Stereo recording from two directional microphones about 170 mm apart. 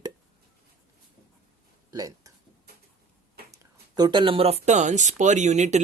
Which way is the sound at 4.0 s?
25° right (ahead or behind).